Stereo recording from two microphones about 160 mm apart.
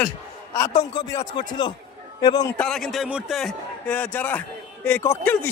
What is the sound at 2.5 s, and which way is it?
Speech, 5° left (ahead or behind).